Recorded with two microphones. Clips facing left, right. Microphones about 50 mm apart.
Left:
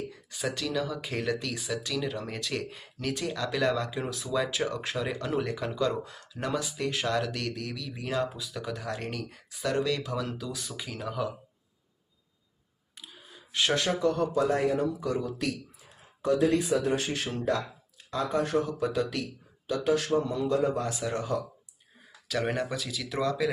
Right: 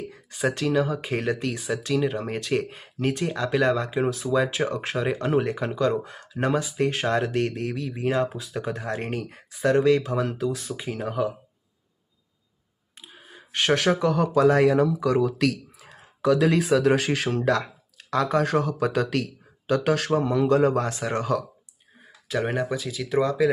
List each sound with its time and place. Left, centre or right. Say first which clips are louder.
0.1 s speech: right 7 dB; right
13.0 s a sound: right 2 dB; right
13.2 s speech: right 5 dB; right
22.3 s speech: right 4 dB; right